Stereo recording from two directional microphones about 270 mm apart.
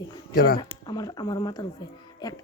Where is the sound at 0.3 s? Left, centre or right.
Left.